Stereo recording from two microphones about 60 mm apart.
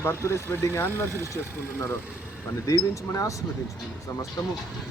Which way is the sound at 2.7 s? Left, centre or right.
Left.